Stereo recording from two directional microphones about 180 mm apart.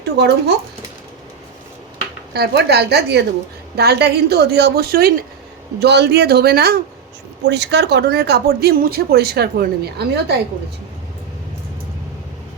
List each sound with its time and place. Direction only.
0.0 s a woman's voice: 70° right (ahead or behind)
2.3 s a woman's voice: 65° right (ahead or behind)
7.4 s speech: 70° right (ahead or behind)